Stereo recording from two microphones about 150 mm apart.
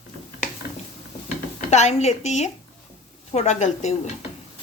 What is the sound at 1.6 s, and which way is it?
A woman's voice, 50° left (ahead or behind).